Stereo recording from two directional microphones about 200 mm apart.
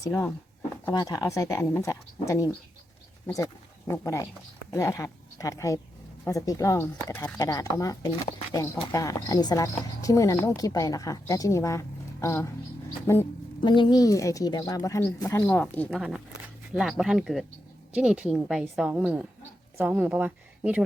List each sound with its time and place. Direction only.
0.0 s a woman's voice: 10° left (ahead or behind); by 20.8 s 10° right (ahead or behind)